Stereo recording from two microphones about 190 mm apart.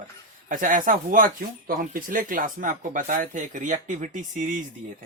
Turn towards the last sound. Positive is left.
turn(degrees=-40)  # may be behind; listen again after turning